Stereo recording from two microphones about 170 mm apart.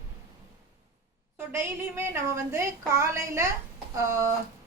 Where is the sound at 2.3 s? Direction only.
15° right (ahead or behind).